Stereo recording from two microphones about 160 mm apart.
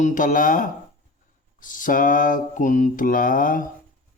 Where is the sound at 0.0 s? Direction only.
55° left (ahead or behind).